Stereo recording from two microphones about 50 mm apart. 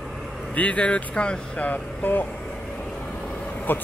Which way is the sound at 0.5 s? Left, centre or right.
Left.